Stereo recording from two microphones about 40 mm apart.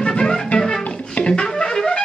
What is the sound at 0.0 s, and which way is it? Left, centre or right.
Music, left.